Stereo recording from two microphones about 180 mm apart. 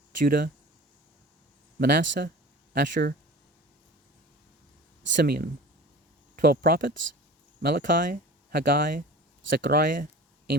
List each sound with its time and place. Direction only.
0.2 s speech: 55° right (ahead or behind)
1.8 s speech: 60° right (ahead or behind)
5.0 s speech: 70° right (ahead or behind)